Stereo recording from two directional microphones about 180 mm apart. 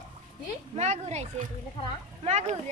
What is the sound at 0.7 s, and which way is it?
A woman's voice, 35° right (ahead or behind).